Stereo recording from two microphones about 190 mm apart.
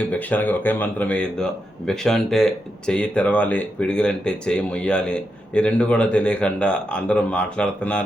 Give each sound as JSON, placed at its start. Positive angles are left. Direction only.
{"t": 0.0, "sound": "speech", "side_deg": 10}